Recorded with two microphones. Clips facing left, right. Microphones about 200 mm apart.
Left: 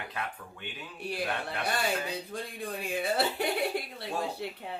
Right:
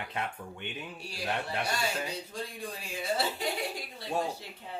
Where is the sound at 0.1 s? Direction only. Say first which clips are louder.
Right 2 dB; 25° right (ahead or behind).